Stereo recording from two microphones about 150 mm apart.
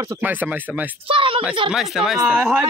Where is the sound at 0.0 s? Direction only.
15° right (ahead or behind).